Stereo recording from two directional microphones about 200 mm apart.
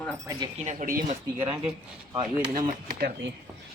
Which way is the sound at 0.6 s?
35° right (ahead or behind).